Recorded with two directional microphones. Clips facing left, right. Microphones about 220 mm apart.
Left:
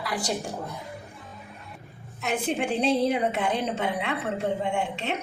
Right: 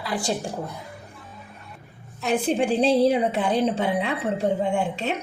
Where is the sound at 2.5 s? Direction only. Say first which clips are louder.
Right 4 dB; 30° right (ahead or behind).